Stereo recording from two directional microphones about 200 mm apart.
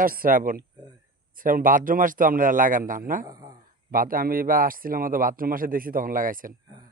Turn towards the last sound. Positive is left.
turn(degrees=-45)  # may be behind; listen again after turning